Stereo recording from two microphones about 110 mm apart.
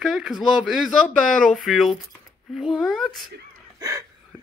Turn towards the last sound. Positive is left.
turn(degrees=-30)  # may be behind; listen again after turning